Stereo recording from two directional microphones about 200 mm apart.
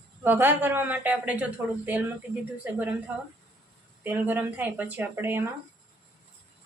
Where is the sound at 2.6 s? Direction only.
5° right (ahead or behind).